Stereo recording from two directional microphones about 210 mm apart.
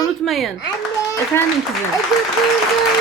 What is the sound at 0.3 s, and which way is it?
Speech, centre (ahead or behind).